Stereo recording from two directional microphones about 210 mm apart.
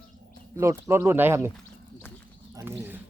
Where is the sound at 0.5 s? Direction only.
15° right (ahead or behind).